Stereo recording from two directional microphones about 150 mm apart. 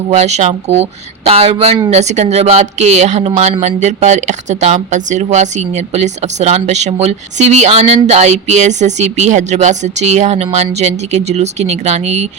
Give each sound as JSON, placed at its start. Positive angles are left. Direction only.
{"t": 0.1, "sound": "speech", "side_deg": -45}